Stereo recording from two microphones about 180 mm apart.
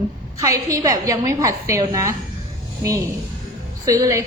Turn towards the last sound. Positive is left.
turn(degrees=-20)  # may be behind; listen again after turning